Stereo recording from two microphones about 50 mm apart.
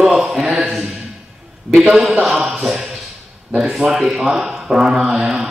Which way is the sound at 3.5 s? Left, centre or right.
Centre.